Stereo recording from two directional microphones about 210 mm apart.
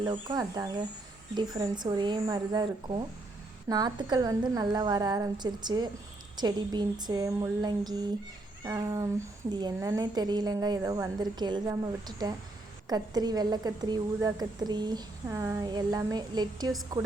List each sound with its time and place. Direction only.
0.0 s a woman's voice: 20° right (ahead or behind)